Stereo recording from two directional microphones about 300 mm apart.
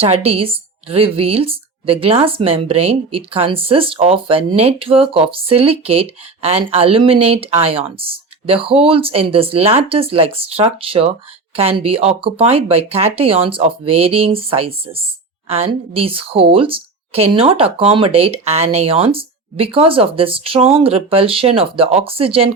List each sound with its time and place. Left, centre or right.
0.0 s a woman's voice: centre